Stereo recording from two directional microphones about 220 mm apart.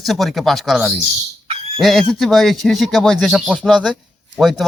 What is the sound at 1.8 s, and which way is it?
Speech, centre (ahead or behind).